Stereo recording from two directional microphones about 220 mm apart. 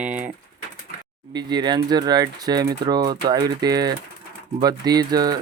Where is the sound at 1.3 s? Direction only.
20° right (ahead or behind).